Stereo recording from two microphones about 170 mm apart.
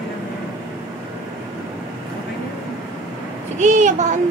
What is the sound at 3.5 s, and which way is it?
Speech, 45° right (ahead or behind).